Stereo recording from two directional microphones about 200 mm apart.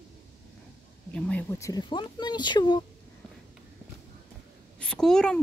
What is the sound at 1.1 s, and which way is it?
Speech, 5° left (ahead or behind).